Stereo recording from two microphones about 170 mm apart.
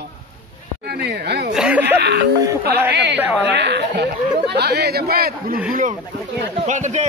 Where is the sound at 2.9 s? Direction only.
90° right; by 5.6 s 60° right (ahead or behind).